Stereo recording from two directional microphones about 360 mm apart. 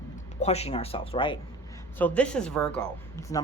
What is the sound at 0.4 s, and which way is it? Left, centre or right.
Speech, centre.